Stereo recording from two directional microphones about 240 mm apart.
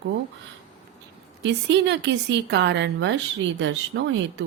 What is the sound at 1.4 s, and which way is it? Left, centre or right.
A woman's voice, right.